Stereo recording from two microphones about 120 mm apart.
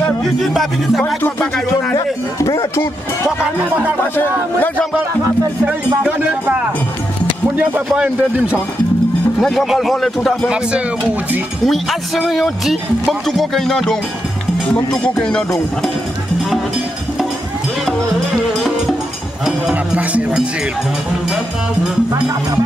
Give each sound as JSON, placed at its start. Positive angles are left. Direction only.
{"t": 0.2, "sound": "a man's voice", "side_deg": 0}
{"t": 1.0, "sound": "speech", "side_deg": 15}
{"t": 2.0, "sound": "speech", "side_deg": 25}
{"t": 4.2, "sound": "speech", "side_deg": 15}
{"t": 6.0, "sound": "speech", "side_deg": -15}
{"t": 9.4, "sound": "a man's voice", "side_deg": 0}
{"t": 11.6, "sound": "a man's voice", "side_deg": 0}
{"t": 15.1, "sound": "a man's voice", "side_deg": 5}
{"t": 18.5, "sound": "music", "side_deg": 0}
{"t": 19.4, "sound": "speech", "side_deg": -10}